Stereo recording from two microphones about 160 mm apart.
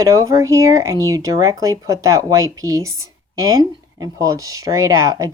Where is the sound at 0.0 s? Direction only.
20° right (ahead or behind).